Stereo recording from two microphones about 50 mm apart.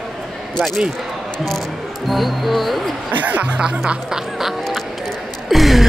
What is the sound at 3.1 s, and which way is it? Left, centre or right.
Speech, right.